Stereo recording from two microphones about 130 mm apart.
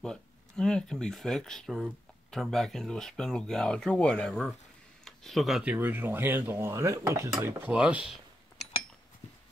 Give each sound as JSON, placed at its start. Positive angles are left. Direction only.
{"t": 0.0, "sound": "speech", "side_deg": 5}